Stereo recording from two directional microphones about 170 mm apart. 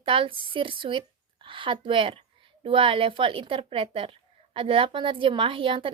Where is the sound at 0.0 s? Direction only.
30° right (ahead or behind).